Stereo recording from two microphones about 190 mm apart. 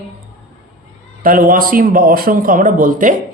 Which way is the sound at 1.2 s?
45° right (ahead or behind).